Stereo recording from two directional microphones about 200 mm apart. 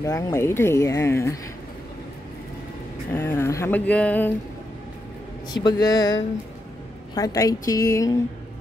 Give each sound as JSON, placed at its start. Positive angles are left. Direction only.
{"t": 0.0, "sound": "speech", "side_deg": 15}
{"t": 3.1, "sound": "speech", "side_deg": 10}
{"t": 5.5, "sound": "speech", "side_deg": 20}
{"t": 7.2, "sound": "speech", "side_deg": 15}